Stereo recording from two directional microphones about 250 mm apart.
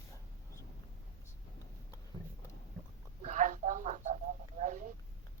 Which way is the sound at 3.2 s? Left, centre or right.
Right.